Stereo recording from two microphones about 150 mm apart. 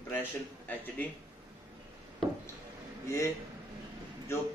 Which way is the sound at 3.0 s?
20° left (ahead or behind).